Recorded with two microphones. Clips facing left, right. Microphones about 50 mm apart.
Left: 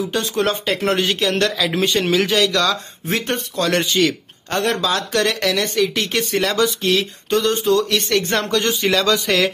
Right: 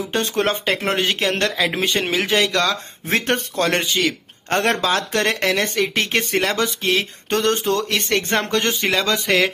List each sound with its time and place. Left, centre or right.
0.1 s speech: right
0.8 s speech: right
7.2 s speech: right
7.6 s speech: right
8.1 s speech: right